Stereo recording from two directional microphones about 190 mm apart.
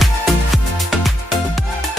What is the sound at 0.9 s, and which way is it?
Music, centre (ahead or behind).